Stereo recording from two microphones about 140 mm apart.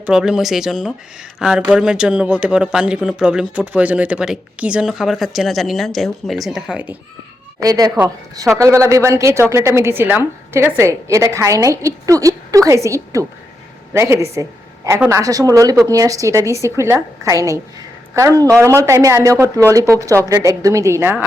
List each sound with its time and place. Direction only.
0.0 s speech: 5° right (ahead or behind)
7.6 s a woman's voice: 25° right (ahead or behind)